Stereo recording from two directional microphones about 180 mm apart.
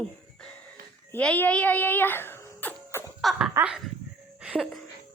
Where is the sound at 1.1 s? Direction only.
10° left (ahead or behind).